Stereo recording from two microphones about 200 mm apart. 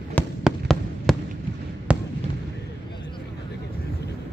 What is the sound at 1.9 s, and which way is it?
Fireworks, 5° right (ahead or behind).